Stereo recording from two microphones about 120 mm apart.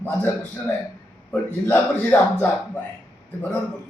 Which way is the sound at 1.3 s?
15° left (ahead or behind).